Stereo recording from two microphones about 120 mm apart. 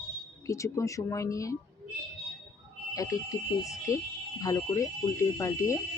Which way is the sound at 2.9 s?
30° left (ahead or behind).